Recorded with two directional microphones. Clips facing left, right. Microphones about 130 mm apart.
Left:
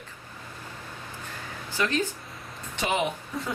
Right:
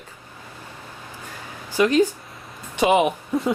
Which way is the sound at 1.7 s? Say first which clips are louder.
Right 10 dB; 15° right (ahead or behind).